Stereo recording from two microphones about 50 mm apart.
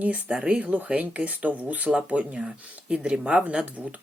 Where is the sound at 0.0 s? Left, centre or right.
Right.